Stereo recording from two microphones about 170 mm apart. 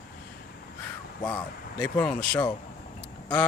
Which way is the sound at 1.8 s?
5° left (ahead or behind).